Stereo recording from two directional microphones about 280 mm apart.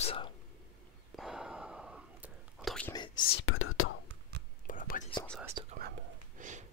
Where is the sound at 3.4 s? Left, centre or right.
Left.